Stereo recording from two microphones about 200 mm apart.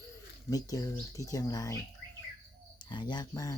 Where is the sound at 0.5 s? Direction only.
15° left (ahead or behind).